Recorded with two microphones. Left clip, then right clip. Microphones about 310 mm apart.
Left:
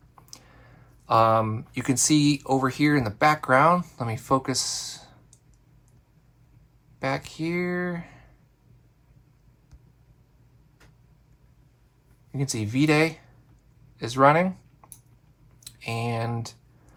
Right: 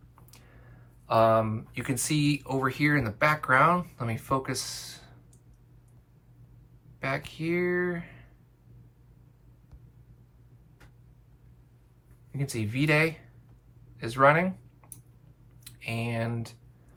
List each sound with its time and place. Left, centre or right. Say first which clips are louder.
1.0 s speech: left 3 dB; left
7.0 s speech: left 3 dB; centre
12.4 s speech: left 5 dB; centre